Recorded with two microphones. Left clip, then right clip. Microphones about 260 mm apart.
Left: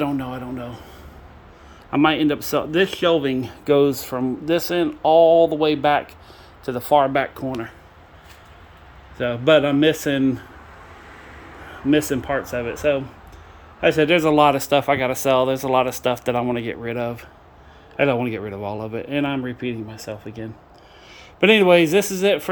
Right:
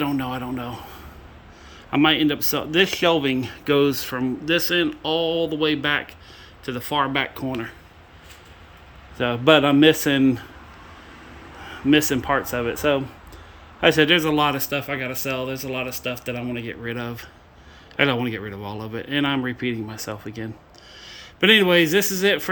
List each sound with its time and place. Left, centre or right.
0.0 s a man's voice: centre
9.1 s a man's voice: centre
11.9 s a man's voice: centre
21.1 s a man's voice: centre